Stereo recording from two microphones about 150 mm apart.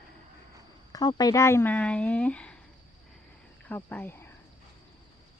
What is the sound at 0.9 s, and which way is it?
Speech, 25° left (ahead or behind).